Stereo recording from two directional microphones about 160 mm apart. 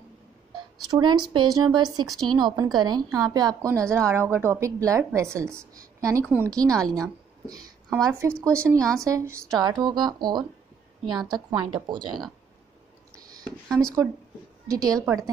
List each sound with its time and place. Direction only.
0.8 s a woman's voice: 25° right (ahead or behind)
13.7 s speech: 5° left (ahead or behind)
14.7 s a woman's voice: 20° right (ahead or behind)